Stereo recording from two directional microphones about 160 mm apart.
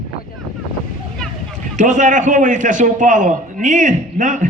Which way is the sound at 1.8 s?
50° right (ahead or behind).